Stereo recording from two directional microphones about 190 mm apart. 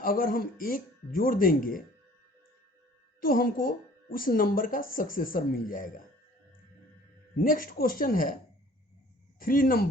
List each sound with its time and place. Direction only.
0.0 s speech: 50° left (ahead or behind)
3.2 s speech: 50° left (ahead or behind)
7.3 s speech: 45° left (ahead or behind)
9.4 s speech: 50° left (ahead or behind)